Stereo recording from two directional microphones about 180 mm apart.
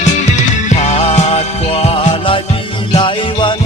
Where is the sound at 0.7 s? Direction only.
40° left (ahead or behind).